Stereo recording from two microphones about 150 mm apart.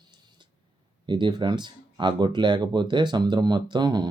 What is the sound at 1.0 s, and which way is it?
Speech, 30° right (ahead or behind).